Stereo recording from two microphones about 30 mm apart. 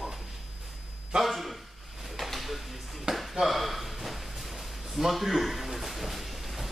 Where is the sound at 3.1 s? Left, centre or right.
Centre.